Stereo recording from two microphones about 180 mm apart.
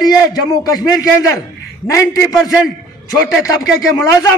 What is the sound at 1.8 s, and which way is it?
Speech, 15° left (ahead or behind).